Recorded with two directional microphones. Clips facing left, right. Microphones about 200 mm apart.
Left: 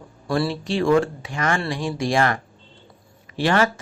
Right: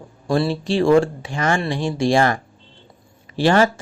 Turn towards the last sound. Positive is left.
turn(degrees=-30)  # may be behind; listen again after turning